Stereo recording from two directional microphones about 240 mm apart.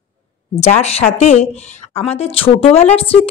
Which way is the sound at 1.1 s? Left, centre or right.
Left.